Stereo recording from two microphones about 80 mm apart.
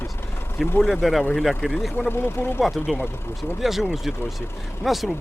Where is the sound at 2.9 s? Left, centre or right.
Left.